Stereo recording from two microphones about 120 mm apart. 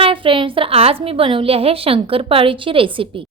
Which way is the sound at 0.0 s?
45° right (ahead or behind).